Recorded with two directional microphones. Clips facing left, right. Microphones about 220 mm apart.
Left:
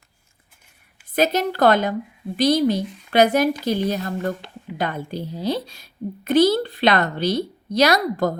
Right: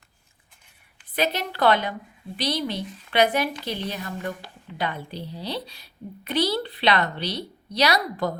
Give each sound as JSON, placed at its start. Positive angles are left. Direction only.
{"t": 1.1, "sound": "a woman's voice", "side_deg": 45}